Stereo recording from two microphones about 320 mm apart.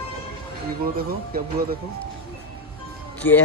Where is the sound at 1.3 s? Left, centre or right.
Right.